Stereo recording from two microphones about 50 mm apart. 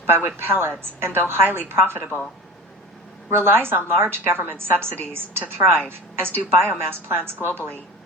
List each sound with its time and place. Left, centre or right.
0.0 s a woman's voice: right
3.2 s a woman's voice: right